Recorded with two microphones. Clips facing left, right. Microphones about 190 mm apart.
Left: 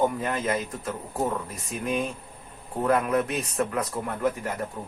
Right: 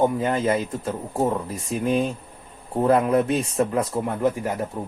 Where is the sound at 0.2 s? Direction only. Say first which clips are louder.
Right 5 dB; 30° right (ahead or behind).